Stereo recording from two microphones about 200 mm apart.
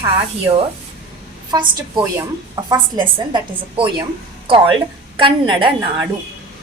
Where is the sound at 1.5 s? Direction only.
20° right (ahead or behind).